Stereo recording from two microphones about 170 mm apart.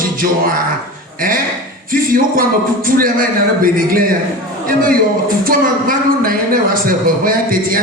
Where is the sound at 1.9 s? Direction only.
55° right (ahead or behind).